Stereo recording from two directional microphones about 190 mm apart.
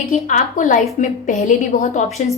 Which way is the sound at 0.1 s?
40° left (ahead or behind).